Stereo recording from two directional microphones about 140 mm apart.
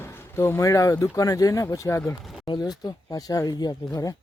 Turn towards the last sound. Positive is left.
turn(degrees=25)  # may be behind; listen again after turning